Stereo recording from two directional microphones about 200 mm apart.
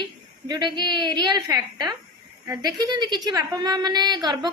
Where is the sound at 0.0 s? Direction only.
20° right (ahead or behind).